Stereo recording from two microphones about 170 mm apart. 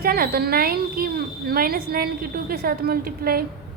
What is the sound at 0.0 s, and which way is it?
A woman's voice, 65° right (ahead or behind).